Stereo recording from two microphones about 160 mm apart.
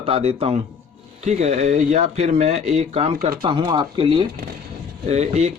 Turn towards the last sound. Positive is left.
turn(degrees=-40)  # may be behind; listen again after turning